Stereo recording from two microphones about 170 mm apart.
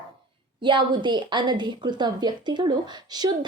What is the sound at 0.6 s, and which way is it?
A woman's voice, 25° right (ahead or behind).